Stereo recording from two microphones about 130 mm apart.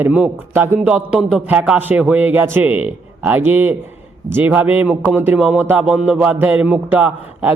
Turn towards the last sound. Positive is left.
turn(degrees=-15)  # may be behind; listen again after turning